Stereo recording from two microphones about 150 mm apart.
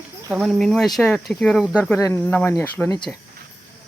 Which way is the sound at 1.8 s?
15° left (ahead or behind).